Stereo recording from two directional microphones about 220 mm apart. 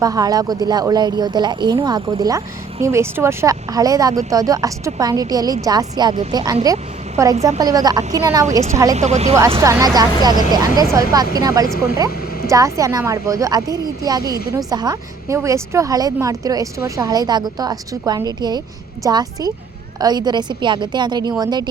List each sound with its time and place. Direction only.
0.0 s a woman's voice: 15° right (ahead or behind)
9.0 s a woman's voice: 30° right (ahead or behind)
9.6 s a woman's voice: 15° right (ahead or behind)